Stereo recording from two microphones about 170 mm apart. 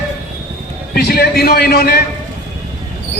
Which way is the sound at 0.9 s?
65° left (ahead or behind).